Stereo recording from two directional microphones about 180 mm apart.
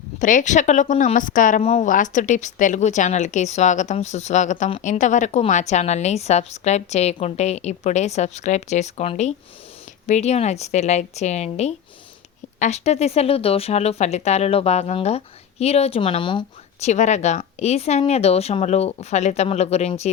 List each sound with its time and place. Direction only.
0.2 s speech: 45° left (ahead or behind); by 16.5 s 25° left (ahead or behind)
16.8 s speech: 40° left (ahead or behind)